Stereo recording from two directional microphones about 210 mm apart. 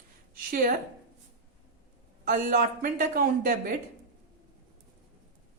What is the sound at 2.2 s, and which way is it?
Speech, 40° right (ahead or behind).